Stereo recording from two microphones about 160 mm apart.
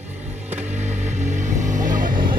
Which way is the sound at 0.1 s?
45° right (ahead or behind).